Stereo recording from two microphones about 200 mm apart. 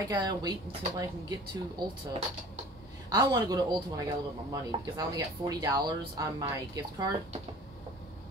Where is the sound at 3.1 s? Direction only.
20° right (ahead or behind).